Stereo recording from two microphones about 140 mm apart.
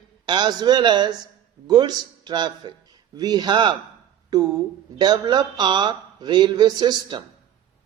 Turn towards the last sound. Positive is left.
turn(degrees=-35)  # may be behind; listen again after turning